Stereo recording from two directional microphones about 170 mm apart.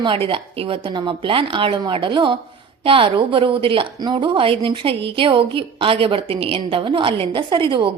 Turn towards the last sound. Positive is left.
turn(degrees=-30)  # may be behind; listen again after turning